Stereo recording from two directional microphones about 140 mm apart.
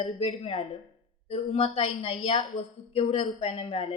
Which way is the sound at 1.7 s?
50° left (ahead or behind).